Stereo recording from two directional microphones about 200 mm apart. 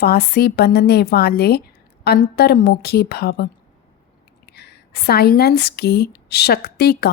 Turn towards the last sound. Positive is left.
turn(degrees=55)  # may be behind; listen again after turning